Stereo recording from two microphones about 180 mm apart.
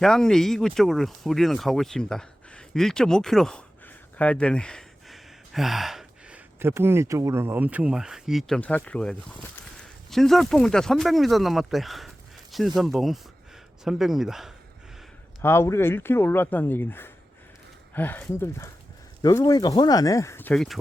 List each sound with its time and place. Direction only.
0.0 s speech: 5° left (ahead or behind)
15.4 s speech: 15° left (ahead or behind)